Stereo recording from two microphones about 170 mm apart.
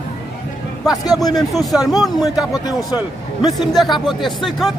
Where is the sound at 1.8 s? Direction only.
20° left (ahead or behind).